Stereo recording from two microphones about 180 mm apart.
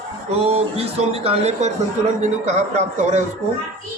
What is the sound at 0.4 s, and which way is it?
Speech, 35° right (ahead or behind).